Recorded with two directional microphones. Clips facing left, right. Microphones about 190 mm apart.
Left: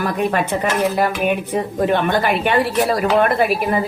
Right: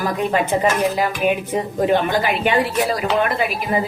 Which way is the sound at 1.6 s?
60° left (ahead or behind).